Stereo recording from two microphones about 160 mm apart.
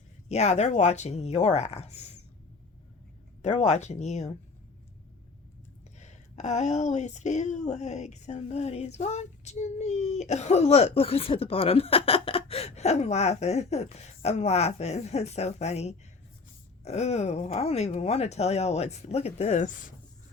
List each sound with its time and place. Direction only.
0.3 s speech: 40° left (ahead or behind)
3.4 s speech: 45° left (ahead or behind)
6.0 s speech: 45° left (ahead or behind)